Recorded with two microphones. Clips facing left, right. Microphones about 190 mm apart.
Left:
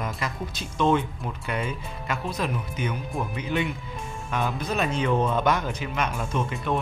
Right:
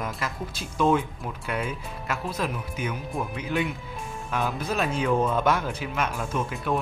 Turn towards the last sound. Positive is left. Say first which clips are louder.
# even
turn(degrees=-5)  # may be behind; listen again after turning